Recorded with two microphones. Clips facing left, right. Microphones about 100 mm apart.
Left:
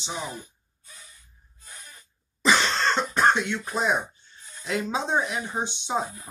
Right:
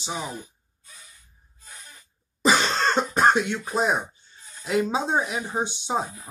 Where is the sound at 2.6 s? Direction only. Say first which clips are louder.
Right 1 dB; 25° right (ahead or behind).